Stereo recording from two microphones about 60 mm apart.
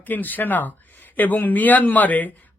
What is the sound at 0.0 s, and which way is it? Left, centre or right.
Speech, left.